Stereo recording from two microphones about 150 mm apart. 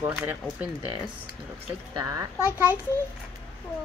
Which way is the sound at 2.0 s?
20° right (ahead or behind).